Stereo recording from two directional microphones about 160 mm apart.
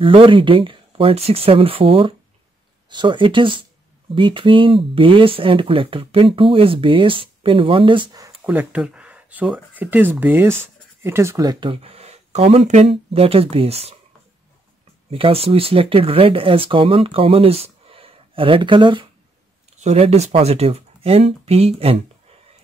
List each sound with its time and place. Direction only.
0.0 s speech: 35° right (ahead or behind)
8.5 s speech: 10° right (ahead or behind); by 12.9 s 50° right (ahead or behind)
12.9 s speech: 35° right (ahead or behind)
15.0 s speech: 35° right (ahead or behind)
19.8 s speech: 45° right (ahead or behind)